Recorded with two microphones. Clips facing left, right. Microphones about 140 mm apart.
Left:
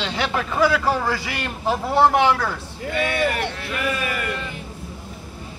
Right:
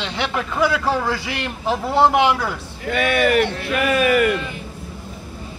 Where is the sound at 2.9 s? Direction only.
75° right (ahead or behind).